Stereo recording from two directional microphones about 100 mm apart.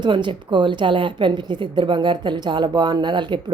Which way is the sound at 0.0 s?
50° right (ahead or behind).